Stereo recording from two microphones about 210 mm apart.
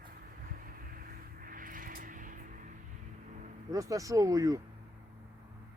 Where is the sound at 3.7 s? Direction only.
15° right (ahead or behind).